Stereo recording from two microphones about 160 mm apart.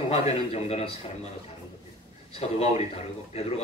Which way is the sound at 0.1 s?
40° left (ahead or behind).